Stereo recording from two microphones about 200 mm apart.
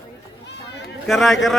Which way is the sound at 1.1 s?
Centre (ahead or behind).